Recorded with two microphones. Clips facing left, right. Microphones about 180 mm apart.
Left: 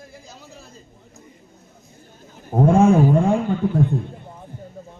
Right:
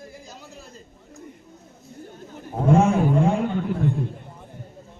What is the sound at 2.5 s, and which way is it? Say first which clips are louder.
Speech: left 9 dB; 50° left (ahead or behind).